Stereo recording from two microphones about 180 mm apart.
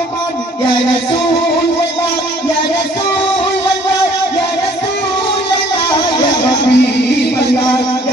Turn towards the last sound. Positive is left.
turn(degrees=70)  # may be behind; listen again after turning